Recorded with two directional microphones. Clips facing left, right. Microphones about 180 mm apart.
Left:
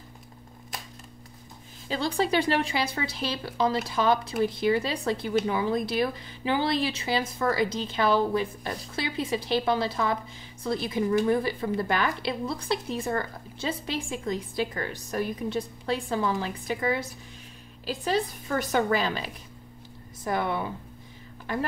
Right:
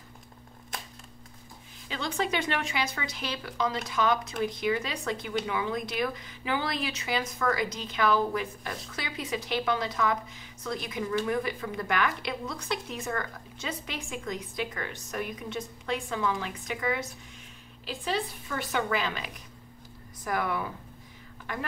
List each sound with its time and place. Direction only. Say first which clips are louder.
1.9 s speech: left 5 dB; 35° left (ahead or behind)